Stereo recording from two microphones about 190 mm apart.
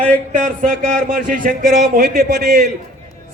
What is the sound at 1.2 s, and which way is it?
A man's voice, 45° right (ahead or behind).